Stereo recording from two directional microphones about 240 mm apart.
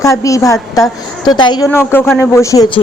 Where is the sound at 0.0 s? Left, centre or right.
Centre.